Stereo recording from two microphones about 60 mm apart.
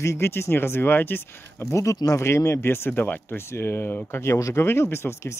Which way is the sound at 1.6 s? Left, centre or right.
Left.